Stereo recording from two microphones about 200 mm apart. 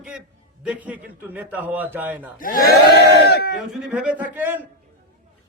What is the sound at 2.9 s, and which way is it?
Speech, 55° left (ahead or behind).